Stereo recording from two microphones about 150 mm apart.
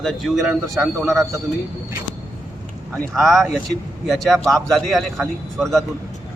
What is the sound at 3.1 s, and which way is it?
A man's voice, centre (ahead or behind).